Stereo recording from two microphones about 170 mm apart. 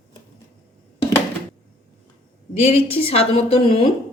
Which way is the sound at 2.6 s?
35° left (ahead or behind).